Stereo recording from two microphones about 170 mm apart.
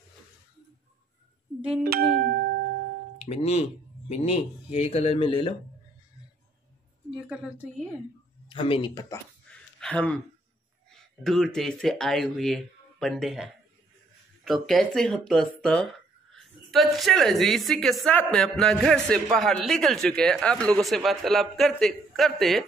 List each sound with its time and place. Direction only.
1.8 s speech: 65° right (ahead or behind)
3.3 s speech: 35° left (ahead or behind)
7.2 s a woman's voice: 5° right (ahead or behind)
8.5 s speech: 30° left (ahead or behind)
9.1 s a sound: 5° left (ahead or behind)
11.2 s speech: centre (ahead or behind)